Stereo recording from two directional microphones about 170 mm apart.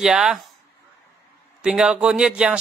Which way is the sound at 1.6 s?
5° right (ahead or behind).